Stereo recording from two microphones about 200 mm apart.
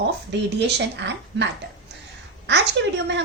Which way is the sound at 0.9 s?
60° right (ahead or behind).